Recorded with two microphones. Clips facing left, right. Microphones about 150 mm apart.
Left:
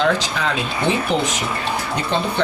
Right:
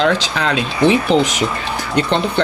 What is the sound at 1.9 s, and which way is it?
Speech, 70° right (ahead or behind).